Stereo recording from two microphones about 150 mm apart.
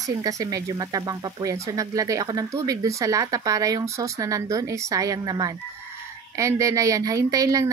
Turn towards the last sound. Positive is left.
turn(degrees=-25)  # may be behind; listen again after turning